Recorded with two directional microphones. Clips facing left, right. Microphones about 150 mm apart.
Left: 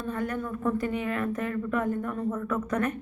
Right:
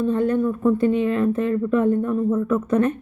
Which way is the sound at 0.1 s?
25° right (ahead or behind).